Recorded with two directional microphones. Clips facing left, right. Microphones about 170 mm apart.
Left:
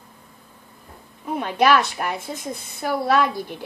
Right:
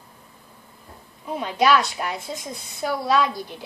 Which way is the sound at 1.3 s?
55° left (ahead or behind).